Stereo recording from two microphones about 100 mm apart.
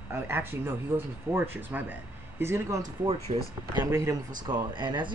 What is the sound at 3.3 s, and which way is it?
Speech, 75° right (ahead or behind).